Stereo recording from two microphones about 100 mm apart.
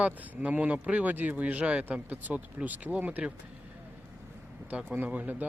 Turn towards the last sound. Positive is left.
turn(degrees=-15)  # may be behind; listen again after turning